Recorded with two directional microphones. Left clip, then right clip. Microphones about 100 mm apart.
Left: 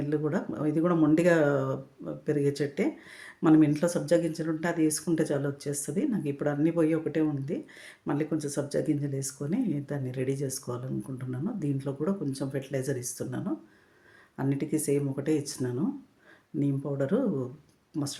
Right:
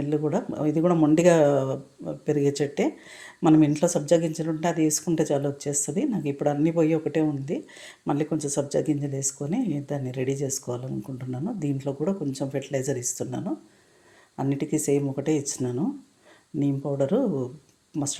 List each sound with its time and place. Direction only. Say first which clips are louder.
0.3 s speech: right 4 dB; 30° right (ahead or behind)